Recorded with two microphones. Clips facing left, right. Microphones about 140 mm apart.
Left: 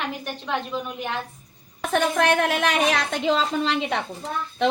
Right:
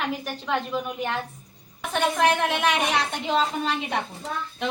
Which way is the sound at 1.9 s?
90° left.